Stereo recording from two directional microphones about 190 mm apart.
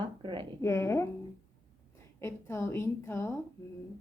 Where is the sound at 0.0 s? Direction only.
25° right (ahead or behind).